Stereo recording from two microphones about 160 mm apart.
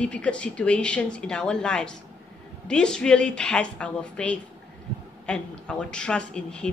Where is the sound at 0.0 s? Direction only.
5° left (ahead or behind).